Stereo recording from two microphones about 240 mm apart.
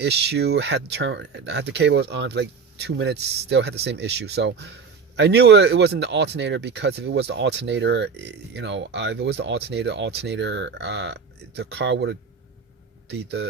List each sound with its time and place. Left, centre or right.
0.0 s speech: right